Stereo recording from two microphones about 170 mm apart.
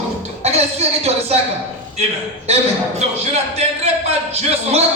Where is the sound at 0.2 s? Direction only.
40° right (ahead or behind).